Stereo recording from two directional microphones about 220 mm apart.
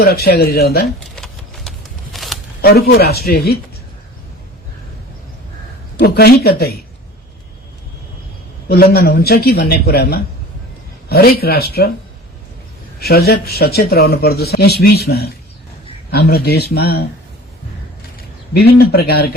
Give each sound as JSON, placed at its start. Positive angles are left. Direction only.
{"t": 0.0, "sound": "speech", "side_deg": 45}
{"t": 0.9, "sound": "vehicle", "side_deg": 0}
{"t": 2.1, "sound": "a sound", "side_deg": 0}
{"t": 2.6, "sound": "speech", "side_deg": 45}
{"t": 6.0, "sound": "speech", "side_deg": 45}
{"t": 8.7, "sound": "speech", "side_deg": 45}
{"t": 13.0, "sound": "speech", "side_deg": 45}
{"t": 18.2, "sound": "speech", "side_deg": 45}